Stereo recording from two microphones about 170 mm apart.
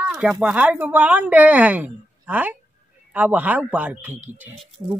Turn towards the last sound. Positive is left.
turn(degrees=-20)  # may be behind; listen again after turning